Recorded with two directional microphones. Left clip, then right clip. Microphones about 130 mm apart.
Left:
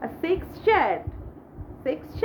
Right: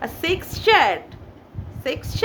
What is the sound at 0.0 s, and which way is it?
A woman's voice, 25° right (ahead or behind).